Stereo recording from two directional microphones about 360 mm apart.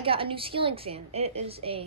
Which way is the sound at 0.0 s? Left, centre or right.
Centre.